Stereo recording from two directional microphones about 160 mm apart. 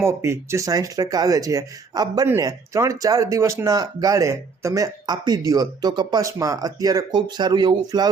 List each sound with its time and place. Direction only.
0.0 s speech: 15° right (ahead or behind)